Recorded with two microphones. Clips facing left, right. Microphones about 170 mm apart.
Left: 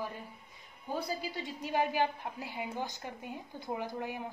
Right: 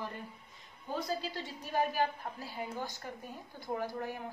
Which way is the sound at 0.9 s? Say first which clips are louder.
Even; 10° left (ahead or behind).